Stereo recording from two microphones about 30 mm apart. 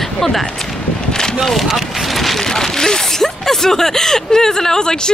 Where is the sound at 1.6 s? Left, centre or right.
Centre.